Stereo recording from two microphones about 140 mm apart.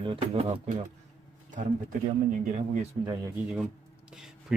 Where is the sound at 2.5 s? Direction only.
55° right (ahead or behind).